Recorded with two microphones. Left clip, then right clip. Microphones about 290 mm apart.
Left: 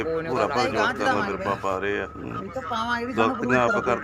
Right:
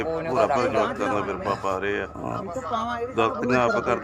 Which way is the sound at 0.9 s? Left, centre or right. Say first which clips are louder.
Left 2 dB; centre.